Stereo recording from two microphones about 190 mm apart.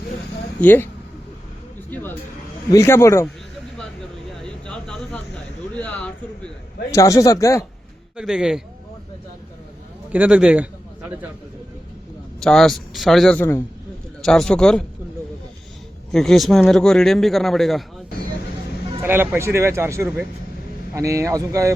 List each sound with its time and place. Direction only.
0.6 s a man's voice: 10° left (ahead or behind)
1.9 s a sound: 10° left (ahead or behind)
2.7 s a man's voice: 15° left (ahead or behind)
4.4 s a sound: 5° left (ahead or behind)
5.7 s a man's voice: 5° left (ahead or behind)
8.1 s a man's voice: 5° right (ahead or behind)
10.1 s a man's voice: 5° right (ahead or behind)
12.4 s a man's voice: centre (ahead or behind)
16.1 s a man's voice: centre (ahead or behind)
19.0 s speech: 10° right (ahead or behind)